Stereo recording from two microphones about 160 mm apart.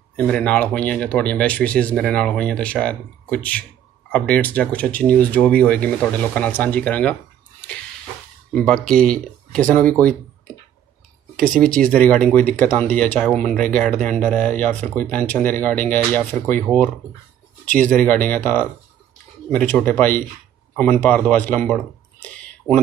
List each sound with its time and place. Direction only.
0.1 s speech: 10° left (ahead or behind)
8.5 s speech: 5° left (ahead or behind)
11.3 s speech: 5° left (ahead or behind)
22.7 s speech: 15° right (ahead or behind)